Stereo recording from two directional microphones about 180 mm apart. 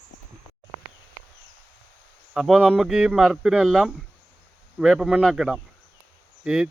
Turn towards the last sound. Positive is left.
turn(degrees=-5)  # may be behind; listen again after turning